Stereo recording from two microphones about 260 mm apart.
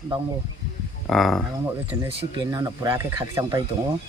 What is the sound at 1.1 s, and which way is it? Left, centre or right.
Speech, centre.